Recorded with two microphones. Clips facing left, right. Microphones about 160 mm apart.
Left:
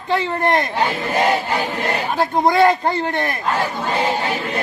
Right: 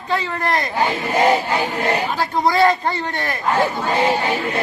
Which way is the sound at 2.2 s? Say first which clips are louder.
Left 3 dB; 20° left (ahead or behind).